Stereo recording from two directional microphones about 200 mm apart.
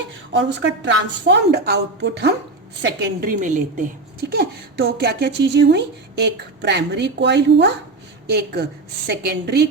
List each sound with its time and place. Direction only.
0.3 s a woman's voice: 60° right (ahead or behind)